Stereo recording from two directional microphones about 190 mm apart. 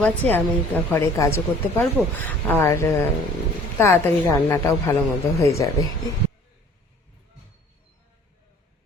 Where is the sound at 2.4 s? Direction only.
10° left (ahead or behind).